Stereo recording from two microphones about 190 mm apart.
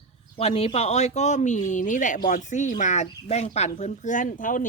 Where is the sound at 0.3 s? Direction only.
30° left (ahead or behind).